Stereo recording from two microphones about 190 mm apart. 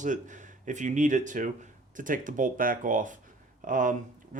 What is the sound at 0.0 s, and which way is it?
Speech, 40° right (ahead or behind).